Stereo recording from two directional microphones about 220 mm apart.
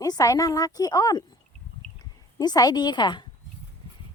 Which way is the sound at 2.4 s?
20° left (ahead or behind).